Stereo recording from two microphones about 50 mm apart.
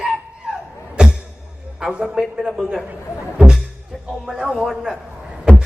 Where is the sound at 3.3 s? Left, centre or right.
Centre.